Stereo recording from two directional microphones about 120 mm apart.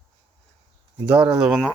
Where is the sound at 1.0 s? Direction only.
10° right (ahead or behind).